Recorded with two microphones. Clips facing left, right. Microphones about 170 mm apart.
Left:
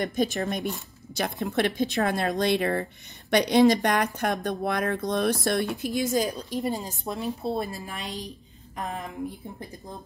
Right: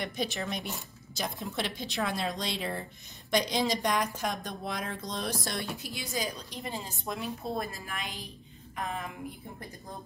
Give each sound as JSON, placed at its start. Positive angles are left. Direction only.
{"t": 0.0, "sound": "speech", "side_deg": 45}
{"t": 0.6, "sound": "speech", "side_deg": 0}
{"t": 1.1, "sound": "speech", "side_deg": 65}
{"t": 6.1, "sound": "a woman's voice", "side_deg": 40}